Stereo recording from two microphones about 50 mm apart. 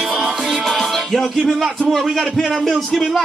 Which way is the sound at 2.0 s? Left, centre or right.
Centre.